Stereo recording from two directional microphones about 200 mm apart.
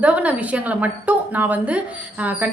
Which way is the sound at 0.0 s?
5° right (ahead or behind).